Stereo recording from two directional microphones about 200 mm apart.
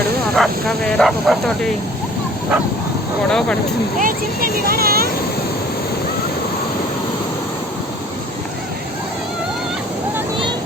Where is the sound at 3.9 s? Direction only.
45° right (ahead or behind).